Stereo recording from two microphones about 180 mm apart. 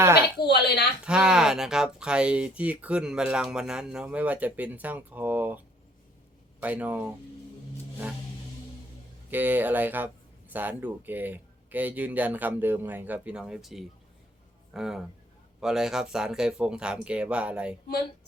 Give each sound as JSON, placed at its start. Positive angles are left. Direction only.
{"t": 0.3, "sound": "a woman's voice", "side_deg": 65}
{"t": 1.0, "sound": "speech", "side_deg": -5}
{"t": 6.6, "sound": "speech", "side_deg": -10}
{"t": 9.3, "sound": "speech", "side_deg": -10}